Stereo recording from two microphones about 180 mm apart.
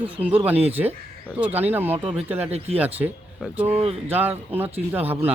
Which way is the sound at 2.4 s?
35° right (ahead or behind).